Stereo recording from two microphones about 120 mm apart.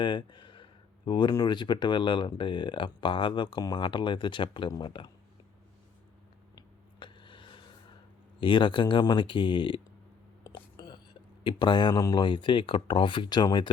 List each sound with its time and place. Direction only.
0.0 s speech: 40° left (ahead or behind)
6.6 s a sound: 40° left (ahead or behind)
8.4 s speech: 40° left (ahead or behind)
10.4 s whispering: 40° left (ahead or behind)
11.4 s speech: 40° left (ahead or behind)